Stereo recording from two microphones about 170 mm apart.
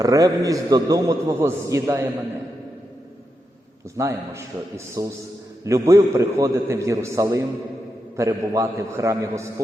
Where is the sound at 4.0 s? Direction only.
15° right (ahead or behind).